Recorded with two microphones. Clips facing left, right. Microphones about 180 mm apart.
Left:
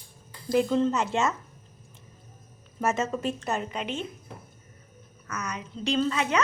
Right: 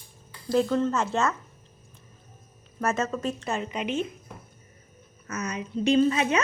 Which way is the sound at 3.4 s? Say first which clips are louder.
Right 1 dB; centre (ahead or behind).